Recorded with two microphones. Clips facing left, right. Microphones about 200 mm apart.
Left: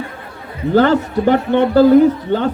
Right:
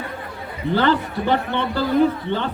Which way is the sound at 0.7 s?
45° left (ahead or behind).